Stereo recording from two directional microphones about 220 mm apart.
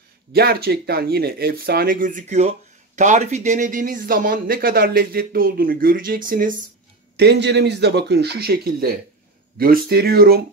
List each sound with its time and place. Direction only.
0.3 s a man's voice: 45° right (ahead or behind)
7.2 s speech: 50° right (ahead or behind)